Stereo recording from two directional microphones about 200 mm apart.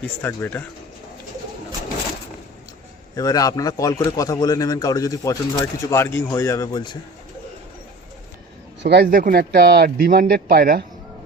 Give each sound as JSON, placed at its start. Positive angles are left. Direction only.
{"t": 0.0, "sound": "a man's voice", "side_deg": 10}
{"t": 3.2, "sound": "a man's voice", "side_deg": 20}
{"t": 8.8, "sound": "speech", "side_deg": -55}